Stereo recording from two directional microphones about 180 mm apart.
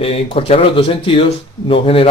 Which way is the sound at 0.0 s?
30° left (ahead or behind).